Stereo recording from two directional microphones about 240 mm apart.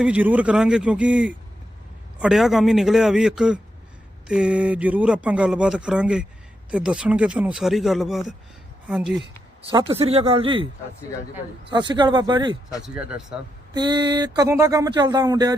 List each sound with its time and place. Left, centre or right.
0.0 s speech: centre
9.6 s speech: right
11.7 s speech: centre
12.8 s speech: centre
13.7 s speech: centre